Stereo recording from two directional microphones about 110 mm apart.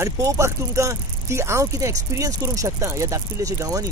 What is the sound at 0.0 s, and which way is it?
Speech, 30° right (ahead or behind).